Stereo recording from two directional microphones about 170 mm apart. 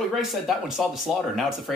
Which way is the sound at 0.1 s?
Centre (ahead or behind).